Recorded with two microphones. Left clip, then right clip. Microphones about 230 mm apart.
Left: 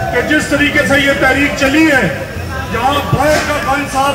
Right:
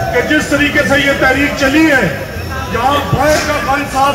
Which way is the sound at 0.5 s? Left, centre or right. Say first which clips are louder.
Even; left.